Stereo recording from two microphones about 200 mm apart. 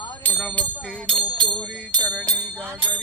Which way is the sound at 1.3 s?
25° right (ahead or behind).